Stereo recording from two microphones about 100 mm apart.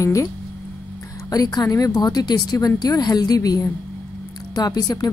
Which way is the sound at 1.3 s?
40° left (ahead or behind).